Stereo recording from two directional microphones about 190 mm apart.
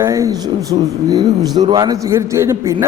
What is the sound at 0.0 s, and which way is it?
A man's voice, 15° right (ahead or behind).